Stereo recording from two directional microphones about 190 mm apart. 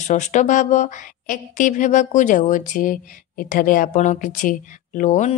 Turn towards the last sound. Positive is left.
turn(degrees=40)  # may be behind; listen again after turning